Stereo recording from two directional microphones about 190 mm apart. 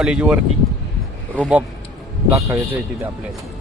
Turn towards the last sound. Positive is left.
turn(degrees=-10)  # may be behind; listen again after turning